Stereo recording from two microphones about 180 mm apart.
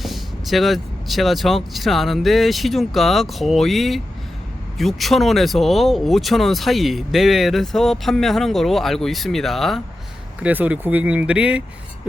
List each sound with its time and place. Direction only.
0.0 s speech: centre (ahead or behind)